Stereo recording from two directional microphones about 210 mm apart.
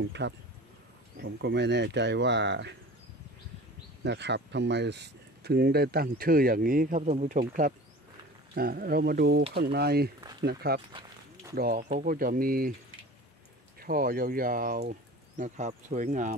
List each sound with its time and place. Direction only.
0.0 s speech: 55° right (ahead or behind)
4.0 s speech: 55° right (ahead or behind)
10.9 s a sound: 20° right (ahead or behind)
11.5 s speech: 45° right (ahead or behind)
13.7 s speech: 45° right (ahead or behind)